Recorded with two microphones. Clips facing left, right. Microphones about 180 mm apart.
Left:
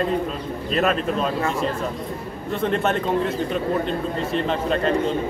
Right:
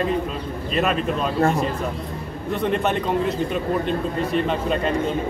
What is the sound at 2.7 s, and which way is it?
Speech, centre (ahead or behind).